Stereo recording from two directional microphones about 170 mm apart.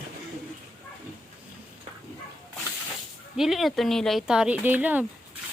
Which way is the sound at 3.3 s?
Centre (ahead or behind).